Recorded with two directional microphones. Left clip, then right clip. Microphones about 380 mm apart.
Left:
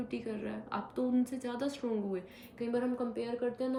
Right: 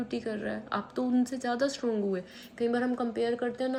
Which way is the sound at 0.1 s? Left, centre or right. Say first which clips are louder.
Right 6 dB; centre.